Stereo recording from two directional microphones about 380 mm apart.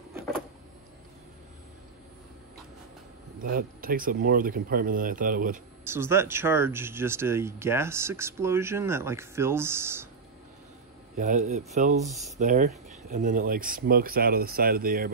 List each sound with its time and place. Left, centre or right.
3.3 s speech: right
5.9 s speech: centre
11.1 s speech: centre
12.1 s speech: centre
12.4 s speech: centre